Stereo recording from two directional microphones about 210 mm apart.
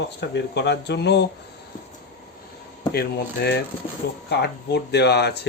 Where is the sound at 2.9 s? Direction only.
50° left (ahead or behind).